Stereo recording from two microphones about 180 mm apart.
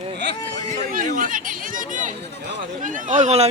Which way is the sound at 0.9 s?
50° right (ahead or behind).